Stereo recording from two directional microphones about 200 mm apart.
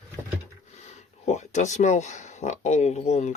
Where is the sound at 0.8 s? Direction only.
35° left (ahead or behind).